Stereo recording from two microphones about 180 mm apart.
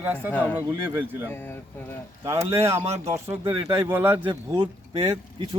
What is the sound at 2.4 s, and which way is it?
Speech, 15° right (ahead or behind).